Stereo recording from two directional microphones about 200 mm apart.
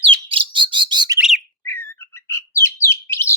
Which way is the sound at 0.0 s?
25° right (ahead or behind).